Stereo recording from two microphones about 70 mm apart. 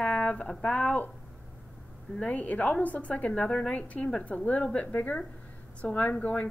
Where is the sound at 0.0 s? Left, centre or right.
Centre.